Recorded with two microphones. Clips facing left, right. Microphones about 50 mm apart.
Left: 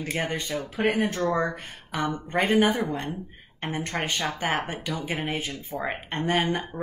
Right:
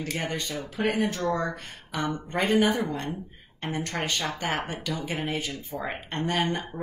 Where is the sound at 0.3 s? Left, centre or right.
Centre.